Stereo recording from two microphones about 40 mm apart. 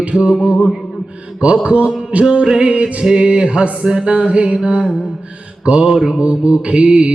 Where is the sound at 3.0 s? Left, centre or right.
Centre.